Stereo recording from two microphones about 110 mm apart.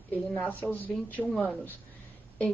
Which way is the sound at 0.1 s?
15° left (ahead or behind).